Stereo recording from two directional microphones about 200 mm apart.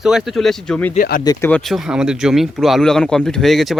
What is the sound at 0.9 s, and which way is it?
Speech, 45° left (ahead or behind).